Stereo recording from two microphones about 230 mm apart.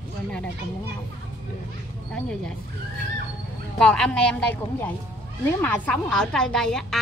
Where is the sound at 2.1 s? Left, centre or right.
Centre.